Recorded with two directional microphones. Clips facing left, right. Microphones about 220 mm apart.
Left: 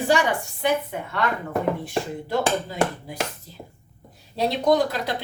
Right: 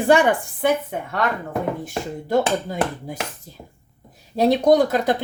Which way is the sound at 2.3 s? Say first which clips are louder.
Right 5 dB; 45° right (ahead or behind).